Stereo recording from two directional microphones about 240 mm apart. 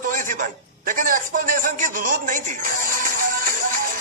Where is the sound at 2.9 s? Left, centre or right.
Right.